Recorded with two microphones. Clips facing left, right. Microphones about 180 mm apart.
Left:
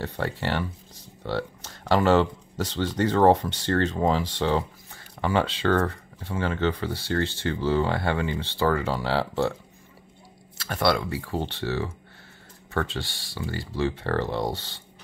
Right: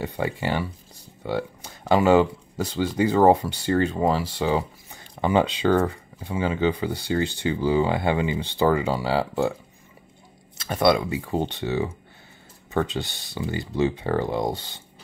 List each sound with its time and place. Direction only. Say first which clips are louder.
0.0 s speech: right 2 dB; 10° right (ahead or behind)
4.9 s speech: right 4 dB; 15° right (ahead or behind)
10.6 s speech: right 4 dB; 20° right (ahead or behind)